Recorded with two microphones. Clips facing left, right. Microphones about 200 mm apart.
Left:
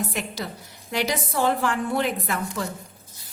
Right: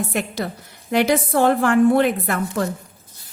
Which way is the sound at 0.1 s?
55° right (ahead or behind).